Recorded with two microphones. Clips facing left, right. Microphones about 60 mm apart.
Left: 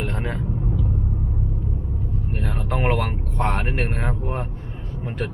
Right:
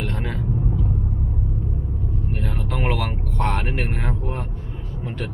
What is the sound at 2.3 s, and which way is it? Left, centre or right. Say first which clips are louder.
Vehicle: left 3 dB; centre.